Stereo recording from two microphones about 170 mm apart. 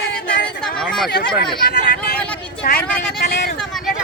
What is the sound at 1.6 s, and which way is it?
Speech, 70° left (ahead or behind).